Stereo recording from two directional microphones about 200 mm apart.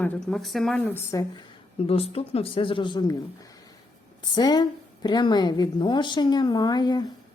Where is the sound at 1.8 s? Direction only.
30° left (ahead or behind).